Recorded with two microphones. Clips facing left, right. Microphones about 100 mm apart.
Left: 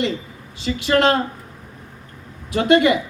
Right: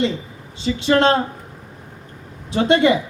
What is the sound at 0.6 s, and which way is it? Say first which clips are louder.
Speech: right 1 dB; 25° right (ahead or behind).